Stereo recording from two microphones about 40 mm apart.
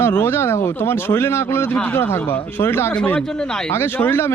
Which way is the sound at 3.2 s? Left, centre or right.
Centre.